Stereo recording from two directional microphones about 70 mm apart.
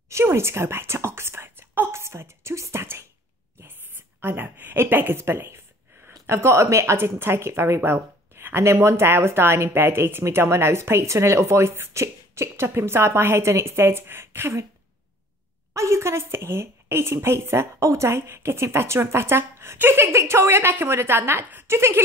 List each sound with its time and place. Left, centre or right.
0.1 s whispering: right
4.2 s a woman's voice: right
15.7 s speech: right